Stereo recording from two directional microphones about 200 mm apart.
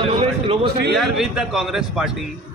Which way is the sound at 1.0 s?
Centre (ahead or behind).